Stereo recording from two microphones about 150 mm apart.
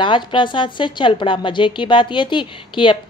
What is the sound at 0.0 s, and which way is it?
A woman's voice, 35° left (ahead or behind).